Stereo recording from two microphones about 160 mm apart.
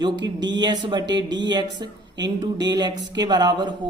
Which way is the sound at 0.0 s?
30° right (ahead or behind).